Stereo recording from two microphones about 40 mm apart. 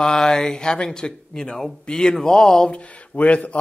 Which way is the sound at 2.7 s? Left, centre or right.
Left.